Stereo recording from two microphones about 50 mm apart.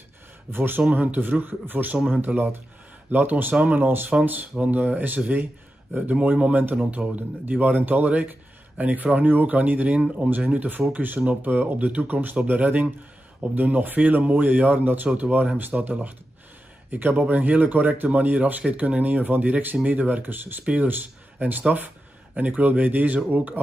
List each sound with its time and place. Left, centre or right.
0.5 s speech: right
4.1 s speech: right
10.9 s speech: right
20.6 s speech: right